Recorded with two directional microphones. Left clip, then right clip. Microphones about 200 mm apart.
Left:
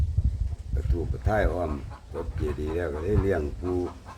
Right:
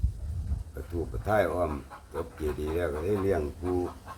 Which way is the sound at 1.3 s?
5° left (ahead or behind).